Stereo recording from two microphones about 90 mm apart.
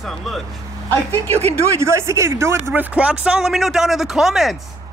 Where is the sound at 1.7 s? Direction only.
30° right (ahead or behind).